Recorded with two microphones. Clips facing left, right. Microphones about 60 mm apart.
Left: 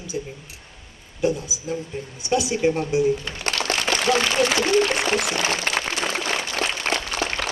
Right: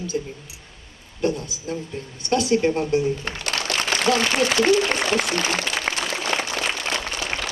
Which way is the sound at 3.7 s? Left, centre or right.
Left.